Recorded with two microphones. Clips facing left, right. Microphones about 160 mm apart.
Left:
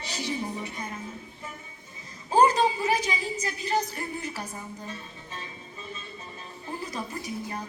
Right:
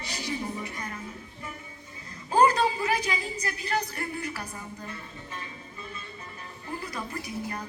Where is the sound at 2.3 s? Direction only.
20° left (ahead or behind).